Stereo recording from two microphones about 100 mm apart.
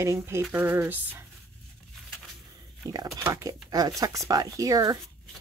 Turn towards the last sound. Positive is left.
turn(degrees=-35)  # may be behind; listen again after turning